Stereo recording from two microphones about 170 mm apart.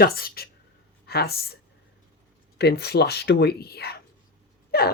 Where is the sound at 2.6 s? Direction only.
70° left (ahead or behind).